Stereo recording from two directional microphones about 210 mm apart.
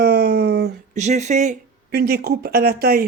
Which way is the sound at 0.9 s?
35° right (ahead or behind).